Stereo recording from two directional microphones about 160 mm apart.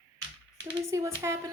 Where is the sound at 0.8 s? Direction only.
20° right (ahead or behind).